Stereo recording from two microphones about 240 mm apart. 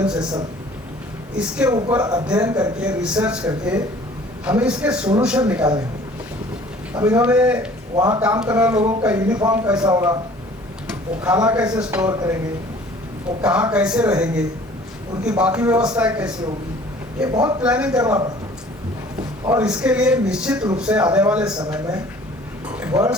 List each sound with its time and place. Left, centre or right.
0.0 s speech: centre
1.4 s speech: centre
1.7 s speech: centre
4.4 s speech: centre
6.9 s speech: centre
11.2 s speech: centre
13.4 s speech: centre
19.5 s speech: centre
22.9 s speech: centre